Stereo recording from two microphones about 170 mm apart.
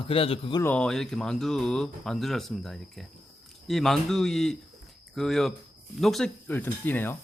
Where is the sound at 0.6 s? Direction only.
5° left (ahead or behind).